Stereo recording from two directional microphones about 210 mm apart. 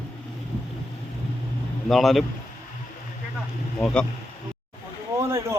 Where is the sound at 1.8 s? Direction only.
Centre (ahead or behind).